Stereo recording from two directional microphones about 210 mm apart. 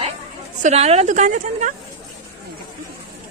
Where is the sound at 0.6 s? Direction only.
30° right (ahead or behind).